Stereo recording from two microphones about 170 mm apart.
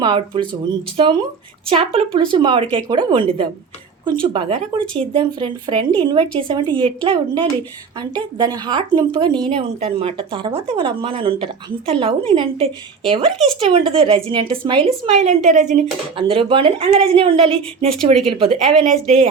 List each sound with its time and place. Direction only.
0.0 s speech: 30° right (ahead or behind)
15.0 s a woman's voice: 40° right (ahead or behind)
16.1 s speech: 30° right (ahead or behind)
17.9 s speech: centre (ahead or behind)
18.3 s speech: 35° right (ahead or behind)